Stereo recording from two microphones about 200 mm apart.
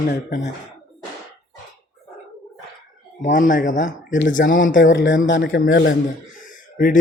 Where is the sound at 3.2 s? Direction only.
40° left (ahead or behind).